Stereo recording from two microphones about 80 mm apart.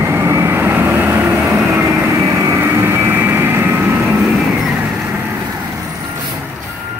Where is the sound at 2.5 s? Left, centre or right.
Right.